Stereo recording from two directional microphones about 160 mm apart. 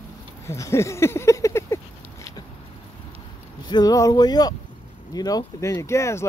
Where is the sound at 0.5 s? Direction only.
20° left (ahead or behind).